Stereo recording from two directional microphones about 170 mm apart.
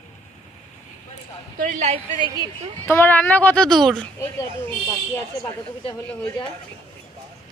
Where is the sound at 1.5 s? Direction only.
55° right (ahead or behind).